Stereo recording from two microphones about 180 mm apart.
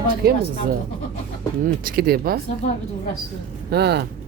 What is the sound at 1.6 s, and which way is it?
Speech, 55° right (ahead or behind).